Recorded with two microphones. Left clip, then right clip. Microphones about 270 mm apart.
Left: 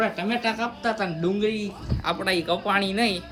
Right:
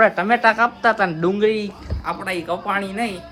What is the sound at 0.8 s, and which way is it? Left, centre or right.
Speech, right.